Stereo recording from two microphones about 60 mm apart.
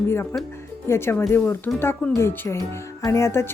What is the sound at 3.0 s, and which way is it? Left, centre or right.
Speech, left.